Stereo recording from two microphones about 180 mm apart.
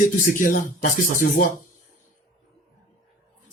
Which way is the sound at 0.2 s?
50° left (ahead or behind).